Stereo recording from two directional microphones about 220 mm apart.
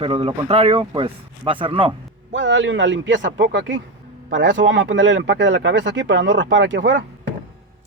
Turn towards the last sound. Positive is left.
turn(degrees=-60)  # may be behind; listen again after turning